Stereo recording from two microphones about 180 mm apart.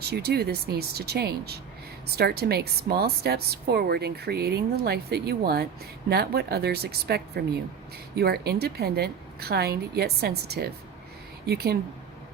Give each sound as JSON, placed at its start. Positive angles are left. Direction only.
{"t": 0.0, "sound": "a woman's voice", "side_deg": -65}